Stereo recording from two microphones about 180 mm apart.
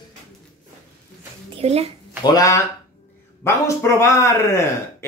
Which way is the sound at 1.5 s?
35° right (ahead or behind).